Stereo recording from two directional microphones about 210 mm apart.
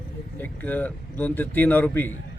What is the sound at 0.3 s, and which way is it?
Speech, 10° left (ahead or behind).